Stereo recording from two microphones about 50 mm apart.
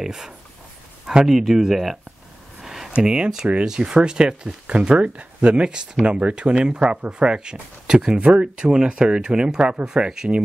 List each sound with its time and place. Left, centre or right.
0.0 s speech: centre
2.6 s a sound: centre
3.0 s speech: centre